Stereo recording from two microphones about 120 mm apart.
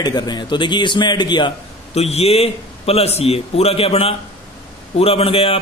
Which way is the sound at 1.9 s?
60° left (ahead or behind).